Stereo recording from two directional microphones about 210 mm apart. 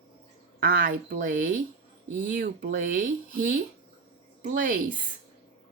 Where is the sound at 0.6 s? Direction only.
45° right (ahead or behind).